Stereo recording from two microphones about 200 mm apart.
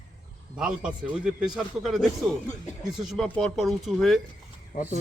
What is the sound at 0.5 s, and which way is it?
A man's voice, 5° right (ahead or behind).